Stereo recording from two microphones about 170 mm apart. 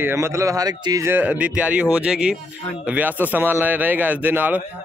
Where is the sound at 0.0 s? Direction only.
15° right (ahead or behind).